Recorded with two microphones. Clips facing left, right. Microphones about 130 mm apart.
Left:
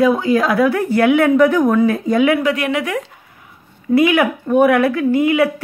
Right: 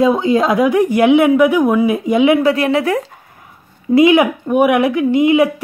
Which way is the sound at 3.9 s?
20° right (ahead or behind).